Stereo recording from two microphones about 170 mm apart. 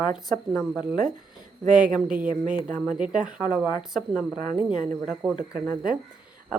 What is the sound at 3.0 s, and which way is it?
Speech, 50° right (ahead or behind).